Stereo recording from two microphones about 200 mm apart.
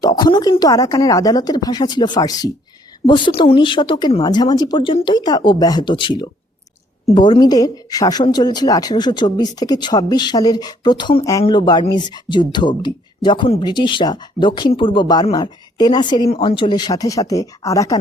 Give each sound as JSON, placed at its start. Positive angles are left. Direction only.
{"t": 0.0, "sound": "a woman's voice", "side_deg": 20}